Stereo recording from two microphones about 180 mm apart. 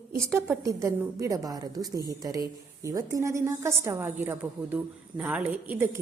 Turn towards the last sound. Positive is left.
turn(degrees=-10)  # may be behind; listen again after turning